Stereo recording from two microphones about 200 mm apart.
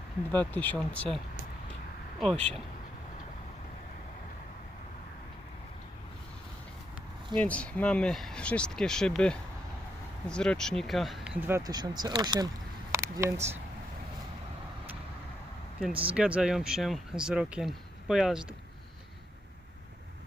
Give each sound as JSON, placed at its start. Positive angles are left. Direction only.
{"t": 0.3, "sound": "speech", "side_deg": 10}
{"t": 7.3, "sound": "speech", "side_deg": 5}
{"t": 12.9, "sound": "a sound", "side_deg": -15}
{"t": 15.8, "sound": "speech", "side_deg": -5}